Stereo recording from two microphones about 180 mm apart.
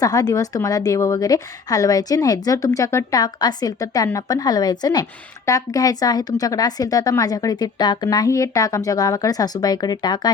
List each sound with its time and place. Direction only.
0.0 s a woman's voice: 20° left (ahead or behind)